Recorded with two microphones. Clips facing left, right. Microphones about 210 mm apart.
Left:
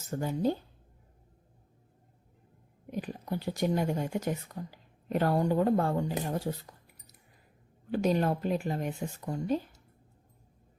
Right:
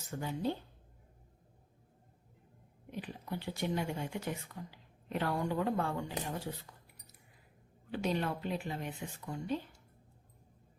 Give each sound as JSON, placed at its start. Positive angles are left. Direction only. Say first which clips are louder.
{"t": 0.1, "sound": "speech", "louder": "left 6 dB", "side_deg": 45}
{"t": 2.9, "sound": "speech", "louder": "left 6 dB", "side_deg": 45}
{"t": 7.9, "sound": "speech", "louder": "left 7 dB", "side_deg": 45}